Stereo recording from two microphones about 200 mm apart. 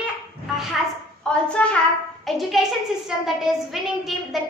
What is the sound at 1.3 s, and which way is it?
A woman's voice, 5° left (ahead or behind).